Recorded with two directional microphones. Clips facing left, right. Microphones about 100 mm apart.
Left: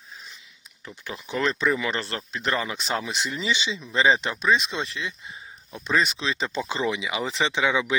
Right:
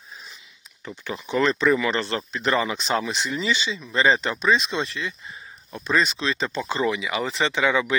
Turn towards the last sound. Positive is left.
turn(degrees=10)  # may be behind; listen again after turning